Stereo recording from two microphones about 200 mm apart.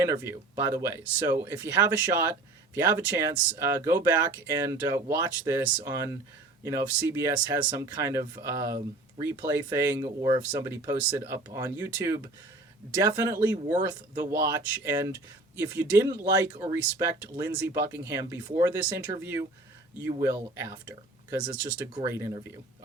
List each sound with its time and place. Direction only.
0.0 s speech: 15° right (ahead or behind)
18.7 s speech: 10° right (ahead or behind)